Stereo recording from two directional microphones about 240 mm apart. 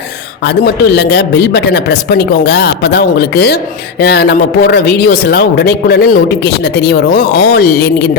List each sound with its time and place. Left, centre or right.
0.4 s speech: left